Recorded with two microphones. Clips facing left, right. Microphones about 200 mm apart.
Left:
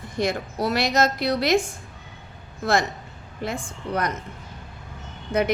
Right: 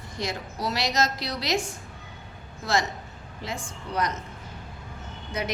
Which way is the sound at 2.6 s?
55° left (ahead or behind).